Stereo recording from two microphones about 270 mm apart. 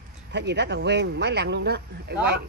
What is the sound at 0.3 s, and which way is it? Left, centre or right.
Speech, right.